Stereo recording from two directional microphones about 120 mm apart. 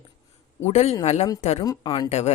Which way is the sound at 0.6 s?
70° left (ahead or behind).